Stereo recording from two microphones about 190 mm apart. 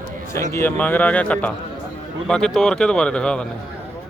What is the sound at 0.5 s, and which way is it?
A man's voice, 10° left (ahead or behind).